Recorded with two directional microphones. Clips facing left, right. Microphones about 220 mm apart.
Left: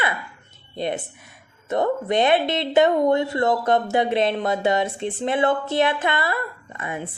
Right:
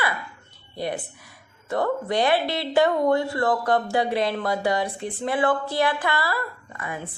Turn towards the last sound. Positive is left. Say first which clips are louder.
# left 3 dB
turn(degrees=20)  # may be behind; listen again after turning